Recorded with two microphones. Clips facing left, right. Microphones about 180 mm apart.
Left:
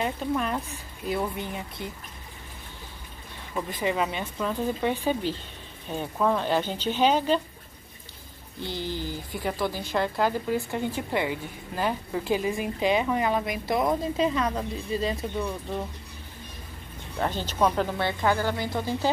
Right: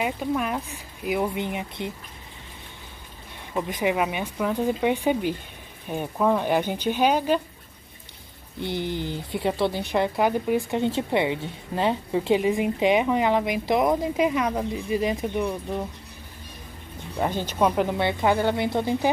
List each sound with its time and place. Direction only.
0.0 s speech: 10° right (ahead or behind)
3.5 s speech: 15° right (ahead or behind)
8.7 s a woman's voice: 20° right (ahead or behind)
17.2 s a woman's voice: 15° right (ahead or behind)